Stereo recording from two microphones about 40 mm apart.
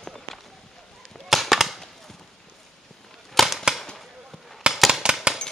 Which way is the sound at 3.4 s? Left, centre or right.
Centre.